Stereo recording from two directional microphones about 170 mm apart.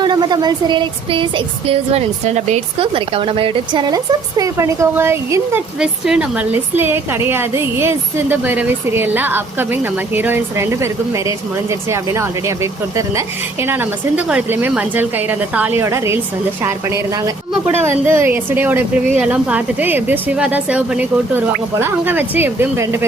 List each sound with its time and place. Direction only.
0.0 s a woman's voice: 25° right (ahead or behind)
11.9 s a woman's voice: 15° right (ahead or behind)